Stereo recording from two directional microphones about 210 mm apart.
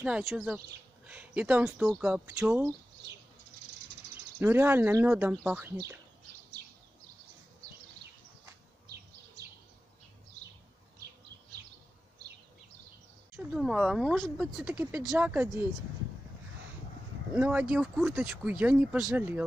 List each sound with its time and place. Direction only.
0.0 s speech: centre (ahead or behind)
4.4 s speech: 10° right (ahead or behind)
6.6 s bird: 50° right (ahead or behind)
8.8 s bird: 50° right (ahead or behind)
13.4 s speech: 5° right (ahead or behind)
17.3 s speech: 5° right (ahead or behind)